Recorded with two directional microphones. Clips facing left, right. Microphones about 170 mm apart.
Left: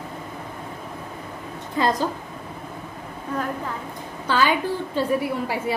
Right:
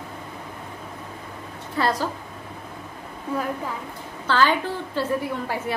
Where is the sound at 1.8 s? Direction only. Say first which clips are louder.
Left 2 dB; 20° left (ahead or behind).